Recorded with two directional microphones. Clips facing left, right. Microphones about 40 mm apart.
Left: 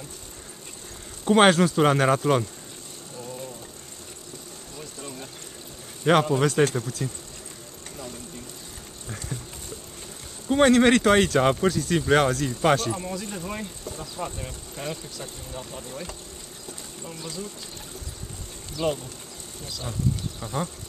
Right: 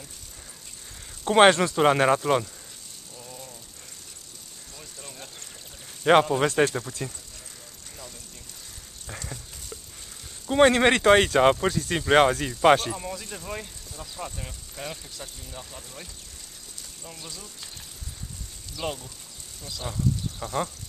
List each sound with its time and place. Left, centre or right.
1.2 s speech: centre
4.7 s a sound: centre
6.2 s speech: centre
10.4 s speech: centre
11.7 s speech: centre
12.1 s speech: right
12.9 s speech: centre
18.8 s speech: centre
19.8 s vehicle: centre